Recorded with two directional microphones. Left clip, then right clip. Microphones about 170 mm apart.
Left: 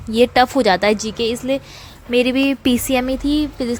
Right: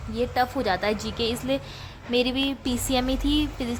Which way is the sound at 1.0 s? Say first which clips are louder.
Left 7 dB; 20° left (ahead or behind).